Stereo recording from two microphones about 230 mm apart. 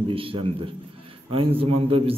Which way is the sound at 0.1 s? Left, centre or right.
Right.